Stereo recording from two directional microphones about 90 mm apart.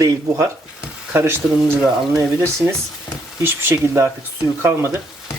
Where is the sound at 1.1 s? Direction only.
25° right (ahead or behind).